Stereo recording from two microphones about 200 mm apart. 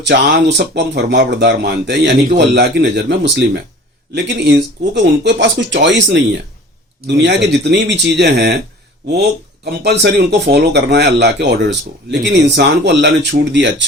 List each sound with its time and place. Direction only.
0.0 s speech: 60° right (ahead or behind)
9.6 s speech: 55° right (ahead or behind)